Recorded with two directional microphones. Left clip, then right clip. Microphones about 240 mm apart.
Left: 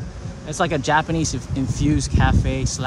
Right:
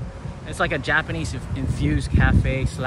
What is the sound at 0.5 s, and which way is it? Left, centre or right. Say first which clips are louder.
Speech: left 2 dB; centre.